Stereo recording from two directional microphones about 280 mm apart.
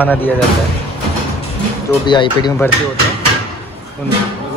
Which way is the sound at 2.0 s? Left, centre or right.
Centre.